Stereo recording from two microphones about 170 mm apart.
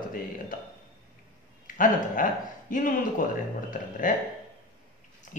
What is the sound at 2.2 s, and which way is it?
Speech, 50° left (ahead or behind).